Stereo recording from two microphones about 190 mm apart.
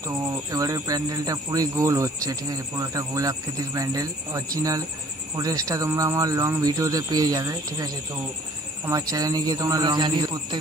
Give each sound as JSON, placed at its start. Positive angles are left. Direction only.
{"t": 0.0, "sound": "speech", "side_deg": -20}
{"t": 5.4, "sound": "speech", "side_deg": -20}